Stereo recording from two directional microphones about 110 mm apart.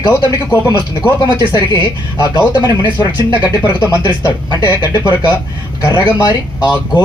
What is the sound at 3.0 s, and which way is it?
Speech, 40° left (ahead or behind).